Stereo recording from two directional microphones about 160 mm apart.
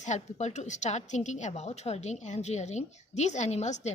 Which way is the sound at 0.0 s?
45° left (ahead or behind).